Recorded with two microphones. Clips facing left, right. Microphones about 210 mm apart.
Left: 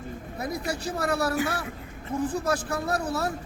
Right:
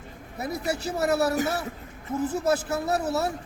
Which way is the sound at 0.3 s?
25° right (ahead or behind).